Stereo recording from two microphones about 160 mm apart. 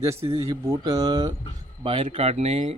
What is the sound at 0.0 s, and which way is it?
Speech, 15° right (ahead or behind).